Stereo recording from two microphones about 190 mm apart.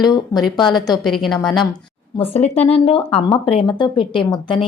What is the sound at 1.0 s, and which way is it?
Speech, centre (ahead or behind).